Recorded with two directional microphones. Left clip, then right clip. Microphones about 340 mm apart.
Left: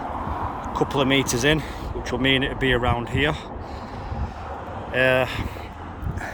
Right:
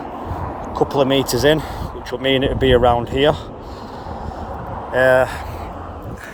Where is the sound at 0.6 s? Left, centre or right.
Centre.